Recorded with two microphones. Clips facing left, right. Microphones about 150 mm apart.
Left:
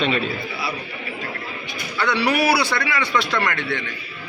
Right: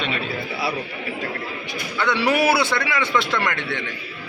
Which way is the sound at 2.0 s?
20° right (ahead or behind).